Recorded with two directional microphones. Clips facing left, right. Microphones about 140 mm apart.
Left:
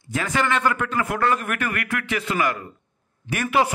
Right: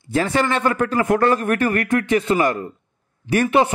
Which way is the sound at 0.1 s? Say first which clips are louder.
Right 4 dB; 35° right (ahead or behind).